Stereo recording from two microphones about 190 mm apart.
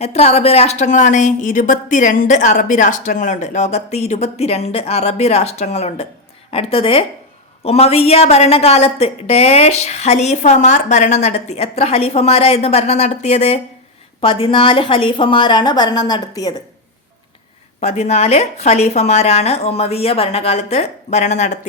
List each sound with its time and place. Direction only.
0.0 s a woman's voice: 35° left (ahead or behind)
17.7 s speech: 35° left (ahead or behind)